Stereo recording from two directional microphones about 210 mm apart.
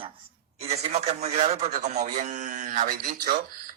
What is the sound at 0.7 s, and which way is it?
A man's voice, 30° right (ahead or behind).